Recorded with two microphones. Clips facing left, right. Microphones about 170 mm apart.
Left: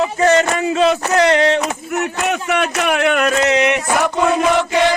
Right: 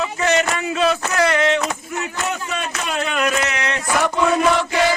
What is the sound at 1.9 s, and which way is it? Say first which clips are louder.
A man's voice: left 6 dB; 75° left (ahead or behind).